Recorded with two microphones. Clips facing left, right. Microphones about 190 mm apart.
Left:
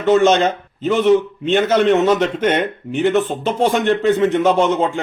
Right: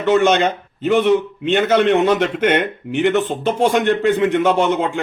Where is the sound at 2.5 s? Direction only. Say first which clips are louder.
Even; 65° right (ahead or behind).